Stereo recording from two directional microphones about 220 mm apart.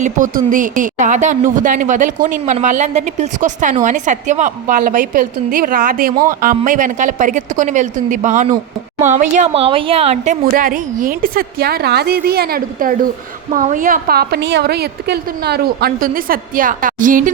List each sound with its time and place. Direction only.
0.0 s a woman's voice: 35° right (ahead or behind)
10.4 s a woman's voice: 40° right (ahead or behind)